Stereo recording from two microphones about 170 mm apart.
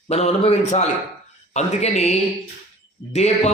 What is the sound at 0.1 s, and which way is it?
Speech, 40° left (ahead or behind).